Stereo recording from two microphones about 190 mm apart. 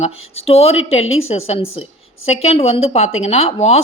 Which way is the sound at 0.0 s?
30° left (ahead or behind).